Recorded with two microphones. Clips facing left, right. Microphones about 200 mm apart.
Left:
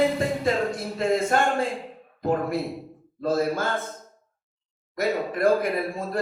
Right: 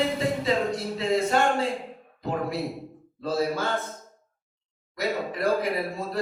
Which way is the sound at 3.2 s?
50° left (ahead or behind).